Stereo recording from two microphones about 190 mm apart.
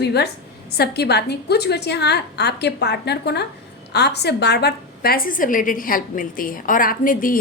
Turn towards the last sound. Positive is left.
turn(degrees=45)  # may be behind; listen again after turning